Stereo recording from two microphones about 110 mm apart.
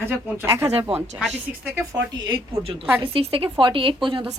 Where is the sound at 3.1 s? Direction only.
55° right (ahead or behind).